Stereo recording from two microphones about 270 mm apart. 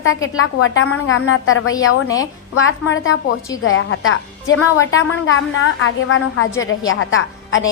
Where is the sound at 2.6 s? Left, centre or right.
Left.